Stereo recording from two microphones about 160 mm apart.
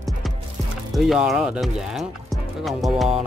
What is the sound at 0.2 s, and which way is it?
Music, centre (ahead or behind).